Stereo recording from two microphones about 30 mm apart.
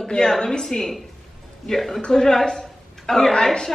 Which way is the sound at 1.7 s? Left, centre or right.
Centre.